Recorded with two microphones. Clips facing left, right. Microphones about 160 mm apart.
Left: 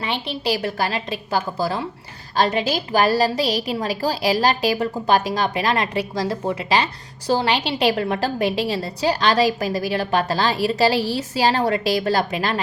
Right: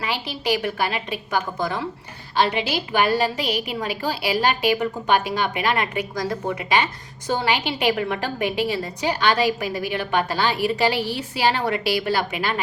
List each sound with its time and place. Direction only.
0.6 s a woman's voice: 35° left (ahead or behind)
2.3 s a woman's voice: 40° left (ahead or behind)
10.5 s a woman's voice: 15° right (ahead or behind)
10.8 s a woman's voice: 35° left (ahead or behind)